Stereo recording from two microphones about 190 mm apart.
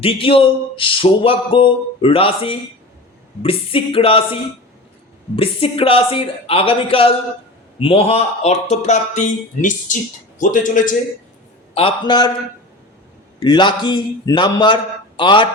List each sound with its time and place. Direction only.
0.0 s speech: 30° left (ahead or behind)
5.4 s a man's voice: 30° left (ahead or behind)
11.7 s speech: 30° left (ahead or behind)
13.4 s speech: 25° left (ahead or behind)